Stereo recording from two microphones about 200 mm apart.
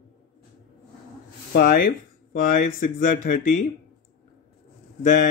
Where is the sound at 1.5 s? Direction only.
50° left (ahead or behind).